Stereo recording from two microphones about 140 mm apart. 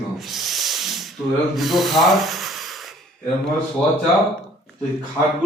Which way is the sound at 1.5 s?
Centre (ahead or behind).